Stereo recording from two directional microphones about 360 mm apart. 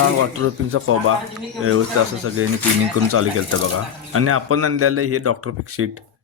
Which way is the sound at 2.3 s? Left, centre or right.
Right.